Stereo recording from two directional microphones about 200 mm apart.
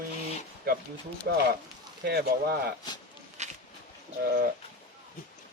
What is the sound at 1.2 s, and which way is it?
Speech, 50° right (ahead or behind).